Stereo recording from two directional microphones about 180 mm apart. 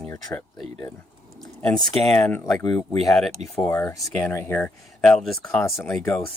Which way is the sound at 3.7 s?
15° left (ahead or behind).